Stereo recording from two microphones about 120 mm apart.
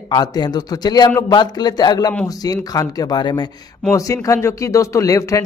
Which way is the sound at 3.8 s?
25° left (ahead or behind).